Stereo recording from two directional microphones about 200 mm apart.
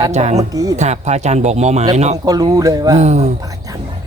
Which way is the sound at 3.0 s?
35° right (ahead or behind).